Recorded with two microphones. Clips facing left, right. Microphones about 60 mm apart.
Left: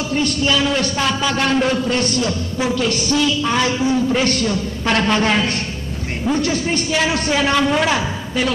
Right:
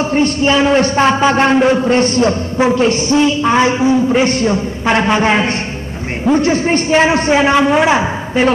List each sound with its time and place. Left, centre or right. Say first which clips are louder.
0.1 s a man's voice: right 4 dB; right